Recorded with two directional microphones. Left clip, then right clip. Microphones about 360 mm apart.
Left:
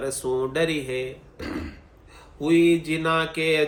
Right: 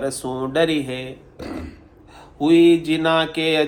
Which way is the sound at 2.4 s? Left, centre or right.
Centre.